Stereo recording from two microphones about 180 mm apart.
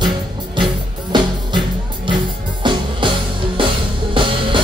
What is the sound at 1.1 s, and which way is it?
Music, 25° right (ahead or behind).